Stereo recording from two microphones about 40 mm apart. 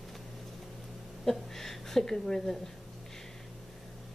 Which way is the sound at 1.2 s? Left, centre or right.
Centre.